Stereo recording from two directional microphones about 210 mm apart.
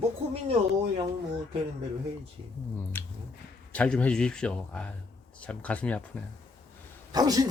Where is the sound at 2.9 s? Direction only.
10° left (ahead or behind).